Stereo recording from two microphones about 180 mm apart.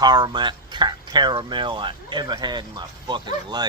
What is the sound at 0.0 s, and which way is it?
Speech, 25° right (ahead or behind).